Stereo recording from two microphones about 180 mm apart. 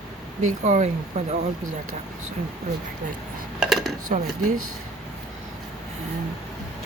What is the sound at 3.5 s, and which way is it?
Dishes, centre (ahead or behind).